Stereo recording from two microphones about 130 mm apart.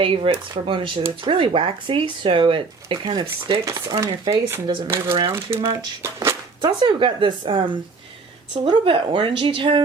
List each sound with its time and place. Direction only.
0.0 s speech: 45° right (ahead or behind)
3.7 s speech: 25° right (ahead or behind)
4.6 s speech: 35° right (ahead or behind)
4.9 s speech: 20° right (ahead or behind)
5.5 s speech: 45° right (ahead or behind)
6.0 s speech: 25° right (ahead or behind)
6.6 s speech: 35° right (ahead or behind)